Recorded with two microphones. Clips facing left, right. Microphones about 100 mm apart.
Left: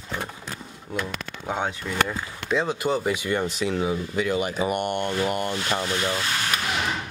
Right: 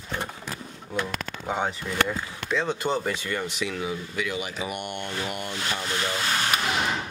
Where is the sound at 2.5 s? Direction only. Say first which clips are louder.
Left 2 dB; 10° left (ahead or behind).